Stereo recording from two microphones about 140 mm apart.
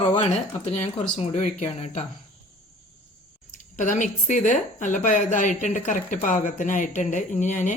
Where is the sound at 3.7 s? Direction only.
65° left (ahead or behind).